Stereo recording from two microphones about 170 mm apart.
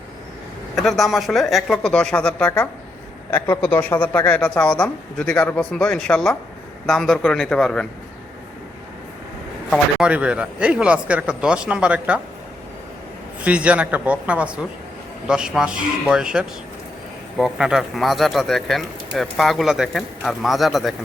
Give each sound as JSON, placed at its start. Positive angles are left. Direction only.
{"t": 0.8, "sound": "speech", "side_deg": 0}
{"t": 10.0, "sound": "a man's voice", "side_deg": -5}
{"t": 13.4, "sound": "a man's voice", "side_deg": -5}